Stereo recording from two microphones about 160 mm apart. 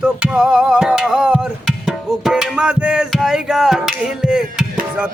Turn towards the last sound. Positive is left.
turn(degrees=-5)  # may be behind; listen again after turning